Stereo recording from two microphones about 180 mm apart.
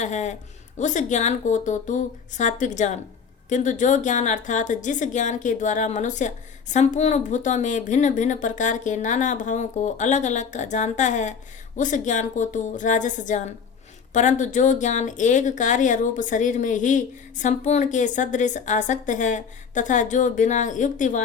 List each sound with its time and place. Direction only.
0.0 s a woman's voice: 40° left (ahead or behind)